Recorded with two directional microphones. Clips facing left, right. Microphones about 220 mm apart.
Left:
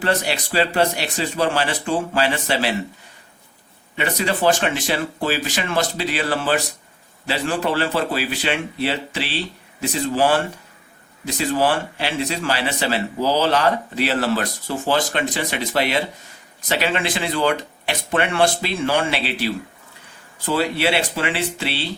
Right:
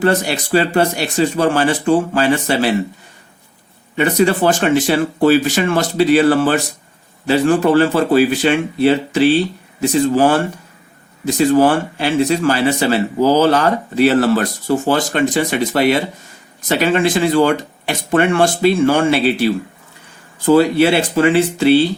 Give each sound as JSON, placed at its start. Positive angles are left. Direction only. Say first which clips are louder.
{"t": 0.0, "sound": "speech", "louder": "right 6 dB", "side_deg": -45}
{"t": 3.9, "sound": "speech", "louder": "right 9 dB", "side_deg": -45}
{"t": 11.3, "sound": "speech", "louder": "right 8 dB", "side_deg": -45}